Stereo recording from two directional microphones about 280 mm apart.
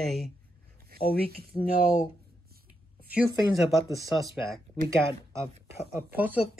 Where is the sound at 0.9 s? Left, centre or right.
Right.